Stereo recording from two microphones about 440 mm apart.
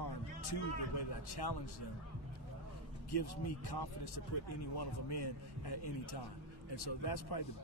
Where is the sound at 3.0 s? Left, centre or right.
Left.